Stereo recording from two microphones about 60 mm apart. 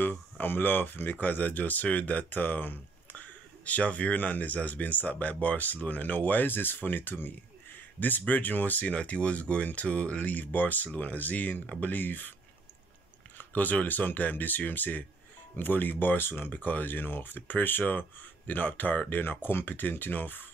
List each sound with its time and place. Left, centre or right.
0.0 s speech: left
13.4 s speech: left